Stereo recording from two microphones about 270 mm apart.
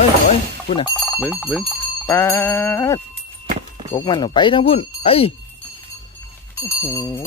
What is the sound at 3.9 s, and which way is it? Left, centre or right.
Speech, centre.